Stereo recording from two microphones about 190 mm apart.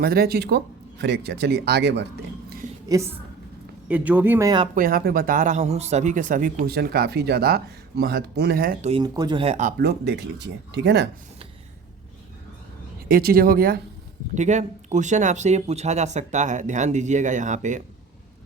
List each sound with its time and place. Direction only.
0.0 s speech: 55° right (ahead or behind)
2.9 s speech: 15° right (ahead or behind)
4.7 s speech: 50° right (ahead or behind)
8.9 s speech: 20° right (ahead or behind); by 9.8 s 40° right (ahead or behind)
9.8 s speech: 60° right (ahead or behind)
13.1 s speech: 50° right (ahead or behind)
14.3 s speech: 40° right (ahead or behind)